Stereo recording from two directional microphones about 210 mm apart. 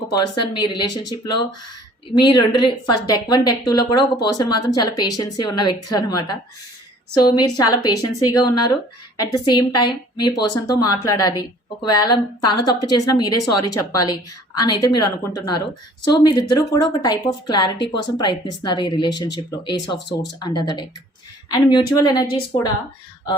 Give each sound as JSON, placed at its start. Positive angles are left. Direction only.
{"t": 0.1, "sound": "a woman's voice", "side_deg": 20}